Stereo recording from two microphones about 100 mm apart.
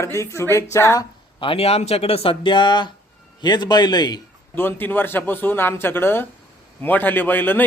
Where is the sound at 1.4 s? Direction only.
70° left (ahead or behind); by 4.2 s 45° left (ahead or behind).